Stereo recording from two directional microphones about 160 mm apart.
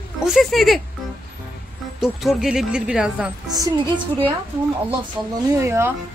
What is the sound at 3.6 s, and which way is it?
Speech, 30° right (ahead or behind).